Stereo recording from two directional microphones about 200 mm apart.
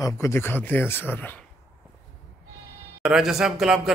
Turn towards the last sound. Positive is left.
turn(degrees=0)  # may be behind; listen again after turning